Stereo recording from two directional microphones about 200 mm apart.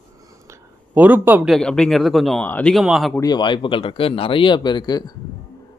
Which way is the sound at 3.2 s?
20° left (ahead or behind).